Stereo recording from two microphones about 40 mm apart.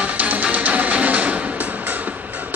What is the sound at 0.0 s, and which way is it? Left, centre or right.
Music, right.